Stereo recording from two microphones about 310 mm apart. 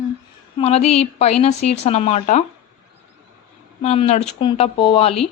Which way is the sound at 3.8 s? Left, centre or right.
Centre.